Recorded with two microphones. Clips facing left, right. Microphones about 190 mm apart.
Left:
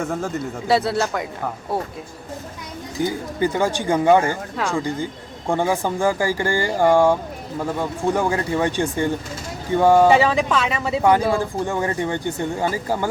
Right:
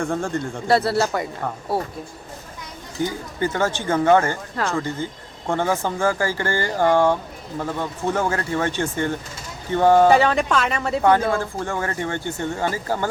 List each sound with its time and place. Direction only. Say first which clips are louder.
0.0 s speech: right 1 dB; 5° left (ahead or behind)
3.0 s speech: left 2 dB; 15° left (ahead or behind)
10.2 s speech: even; centre (ahead or behind)